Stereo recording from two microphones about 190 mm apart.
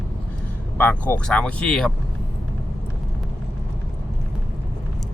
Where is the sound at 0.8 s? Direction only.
10° left (ahead or behind).